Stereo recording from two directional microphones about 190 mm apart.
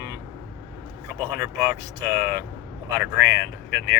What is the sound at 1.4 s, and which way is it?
Speech, 15° right (ahead or behind).